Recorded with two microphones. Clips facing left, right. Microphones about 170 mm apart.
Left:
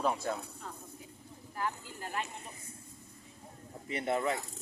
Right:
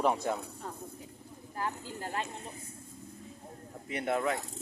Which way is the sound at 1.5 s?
30° right (ahead or behind).